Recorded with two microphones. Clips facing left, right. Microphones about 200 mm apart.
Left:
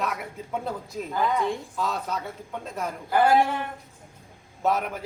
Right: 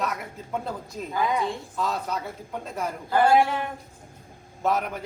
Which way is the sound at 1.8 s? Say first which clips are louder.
Right 1 dB; centre (ahead or behind).